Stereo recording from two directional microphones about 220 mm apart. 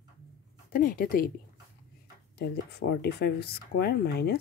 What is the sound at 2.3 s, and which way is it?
Speech, 45° left (ahead or behind).